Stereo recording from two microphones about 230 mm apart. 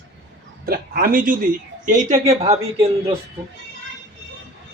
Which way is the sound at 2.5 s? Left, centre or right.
Centre.